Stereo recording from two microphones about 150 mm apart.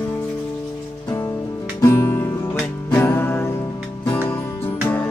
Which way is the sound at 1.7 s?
20° left (ahead or behind).